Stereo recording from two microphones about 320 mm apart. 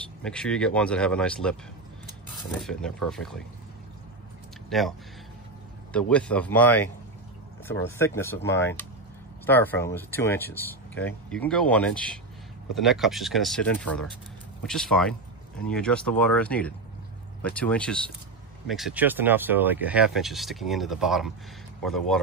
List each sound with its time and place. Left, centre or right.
0.2 s speech: centre
4.6 s speech: centre
5.9 s speech: centre
8.0 s speech: centre